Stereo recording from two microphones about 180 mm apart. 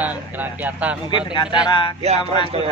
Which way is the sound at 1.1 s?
25° left (ahead or behind).